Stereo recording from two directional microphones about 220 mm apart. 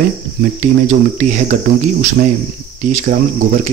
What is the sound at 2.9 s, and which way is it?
Speech, 40° right (ahead or behind).